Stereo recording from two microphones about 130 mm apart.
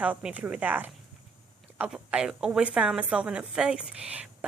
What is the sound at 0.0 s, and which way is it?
A woman's voice, 10° right (ahead or behind).